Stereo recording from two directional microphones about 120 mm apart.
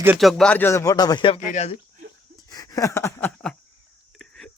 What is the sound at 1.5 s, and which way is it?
Speech, 70° left (ahead or behind).